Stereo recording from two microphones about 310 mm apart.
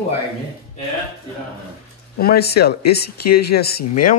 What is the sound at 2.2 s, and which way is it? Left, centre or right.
Speech, left.